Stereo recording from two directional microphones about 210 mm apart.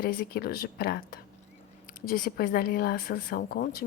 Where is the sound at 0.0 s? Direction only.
45° left (ahead or behind).